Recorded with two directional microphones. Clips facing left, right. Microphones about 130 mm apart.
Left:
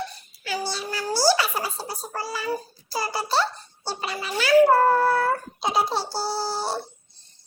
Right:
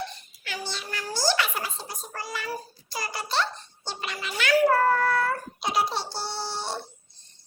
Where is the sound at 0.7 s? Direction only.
35° left (ahead or behind).